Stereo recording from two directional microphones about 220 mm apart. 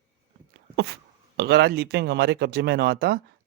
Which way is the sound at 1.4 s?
50° right (ahead or behind).